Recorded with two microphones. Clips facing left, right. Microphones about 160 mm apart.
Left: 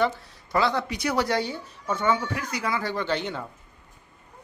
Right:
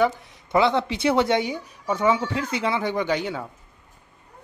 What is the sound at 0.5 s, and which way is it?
Speech, 20° right (ahead or behind).